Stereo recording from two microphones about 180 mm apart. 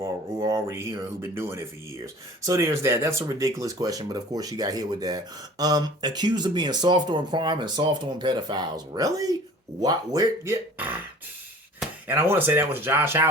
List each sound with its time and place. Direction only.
0.0 s speech: 15° right (ahead or behind)